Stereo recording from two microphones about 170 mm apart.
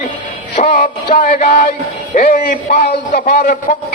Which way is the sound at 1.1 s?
50° left (ahead or behind).